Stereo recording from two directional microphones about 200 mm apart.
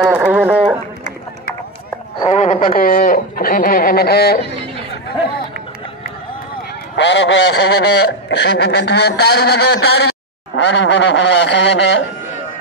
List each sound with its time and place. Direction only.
0.0 s a sound: 5° right (ahead or behind)
2.1 s speech: 30° left (ahead or behind); by 4.5 s 55° left (ahead or behind)
7.0 s speech: 60° left (ahead or behind)